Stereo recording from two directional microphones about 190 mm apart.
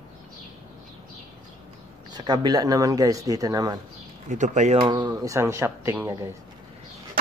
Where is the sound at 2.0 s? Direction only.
20° right (ahead or behind).